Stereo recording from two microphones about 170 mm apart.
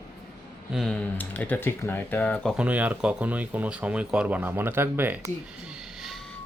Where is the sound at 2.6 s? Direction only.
10° right (ahead or behind).